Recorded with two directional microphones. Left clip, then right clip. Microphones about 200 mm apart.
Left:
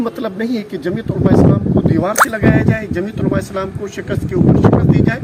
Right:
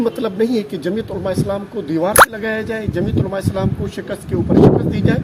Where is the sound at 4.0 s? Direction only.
20° right (ahead or behind).